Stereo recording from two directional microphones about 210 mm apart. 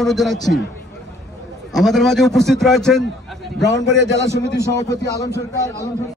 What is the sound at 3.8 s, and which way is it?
Speech, 15° right (ahead or behind).